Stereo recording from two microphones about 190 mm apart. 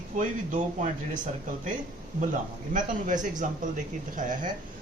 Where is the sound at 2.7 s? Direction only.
40° right (ahead or behind).